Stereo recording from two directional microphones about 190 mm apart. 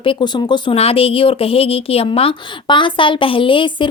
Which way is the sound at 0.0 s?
25° left (ahead or behind).